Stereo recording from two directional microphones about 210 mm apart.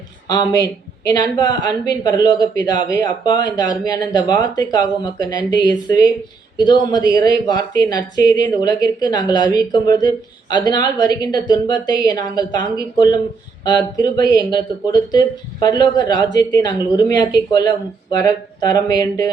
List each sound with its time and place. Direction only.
0.3 s speech: 20° left (ahead or behind)